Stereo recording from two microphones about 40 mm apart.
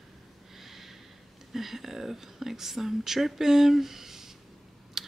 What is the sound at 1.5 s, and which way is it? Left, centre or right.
Speech, centre.